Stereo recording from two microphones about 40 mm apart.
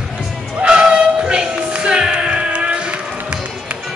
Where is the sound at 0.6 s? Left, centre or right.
Right.